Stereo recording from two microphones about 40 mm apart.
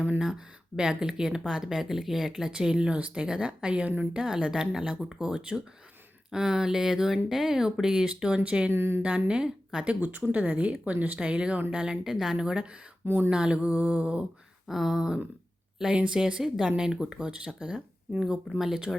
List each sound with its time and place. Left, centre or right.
0.3 s speech: right
2.3 s speech: right
8.4 s mantra: right
8.7 s a woman's voice: right
9.0 s speech: right
9.8 s mantra: right
11.2 s speech: right
13.1 s speech: right
13.3 s mantra: right
14.7 s speech: centre
18.9 s speech: centre